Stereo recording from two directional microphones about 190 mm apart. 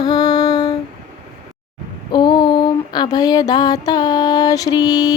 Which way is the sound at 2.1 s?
25° left (ahead or behind).